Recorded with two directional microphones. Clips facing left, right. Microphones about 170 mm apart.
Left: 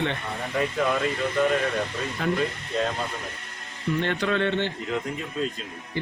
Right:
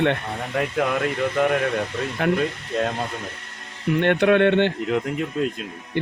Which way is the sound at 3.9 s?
60° right (ahead or behind).